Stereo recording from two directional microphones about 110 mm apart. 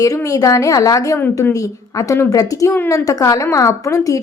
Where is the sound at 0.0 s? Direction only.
30° left (ahead or behind).